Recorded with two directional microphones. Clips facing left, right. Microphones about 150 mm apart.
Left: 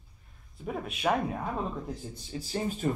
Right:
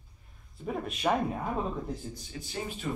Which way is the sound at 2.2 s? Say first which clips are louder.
Left 4 dB; 30° left (ahead or behind).